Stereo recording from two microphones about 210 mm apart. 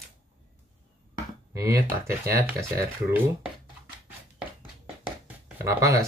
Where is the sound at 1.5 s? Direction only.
15° right (ahead or behind).